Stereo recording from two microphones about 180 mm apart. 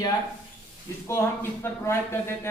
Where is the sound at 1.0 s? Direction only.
15° left (ahead or behind).